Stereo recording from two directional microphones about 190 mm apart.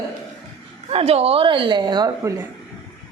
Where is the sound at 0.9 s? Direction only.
30° right (ahead or behind).